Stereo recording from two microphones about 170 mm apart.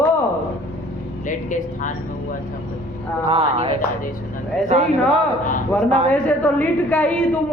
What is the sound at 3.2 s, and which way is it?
Speech, 35° right (ahead or behind).